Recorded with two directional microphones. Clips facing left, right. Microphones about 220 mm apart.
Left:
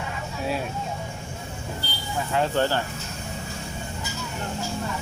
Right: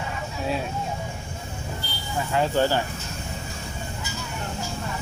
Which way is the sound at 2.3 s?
5° right (ahead or behind).